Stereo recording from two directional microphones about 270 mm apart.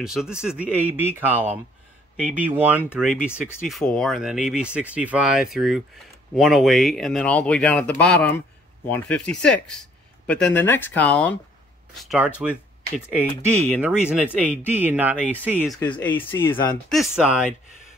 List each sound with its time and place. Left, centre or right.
0.0 s speech: centre
15.7 s speech: centre